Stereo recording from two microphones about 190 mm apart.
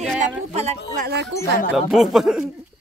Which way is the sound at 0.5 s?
35° right (ahead or behind).